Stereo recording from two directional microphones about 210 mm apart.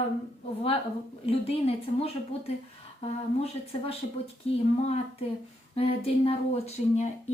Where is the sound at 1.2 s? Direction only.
30° left (ahead or behind).